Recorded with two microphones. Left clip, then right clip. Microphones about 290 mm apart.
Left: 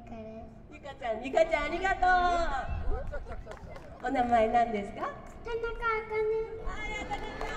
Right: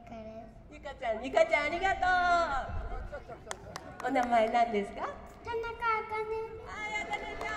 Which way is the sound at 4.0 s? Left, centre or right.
Right.